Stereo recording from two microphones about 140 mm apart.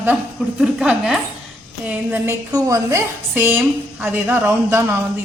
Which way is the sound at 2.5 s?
20° right (ahead or behind).